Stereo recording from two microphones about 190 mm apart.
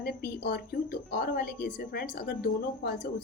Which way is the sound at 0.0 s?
55° left (ahead or behind).